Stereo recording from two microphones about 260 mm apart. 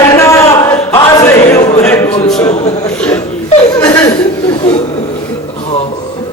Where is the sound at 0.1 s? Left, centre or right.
Centre.